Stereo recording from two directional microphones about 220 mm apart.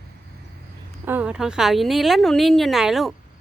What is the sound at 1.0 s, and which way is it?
A woman's voice, 5° right (ahead or behind).